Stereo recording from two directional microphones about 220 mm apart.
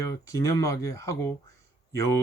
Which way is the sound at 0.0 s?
15° left (ahead or behind).